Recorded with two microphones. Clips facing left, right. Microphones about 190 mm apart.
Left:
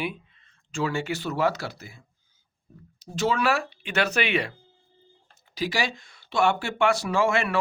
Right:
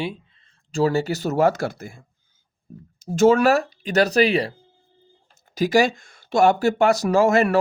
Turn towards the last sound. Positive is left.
turn(degrees=-40)  # may be behind; listen again after turning